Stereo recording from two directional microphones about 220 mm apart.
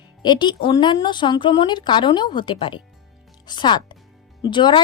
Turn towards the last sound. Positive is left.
turn(degrees=20)  # may be behind; listen again after turning